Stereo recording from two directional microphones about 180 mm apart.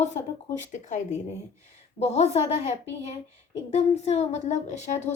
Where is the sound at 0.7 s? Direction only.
45° left (ahead or behind).